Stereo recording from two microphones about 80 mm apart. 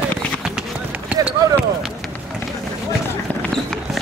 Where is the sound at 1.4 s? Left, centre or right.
Right.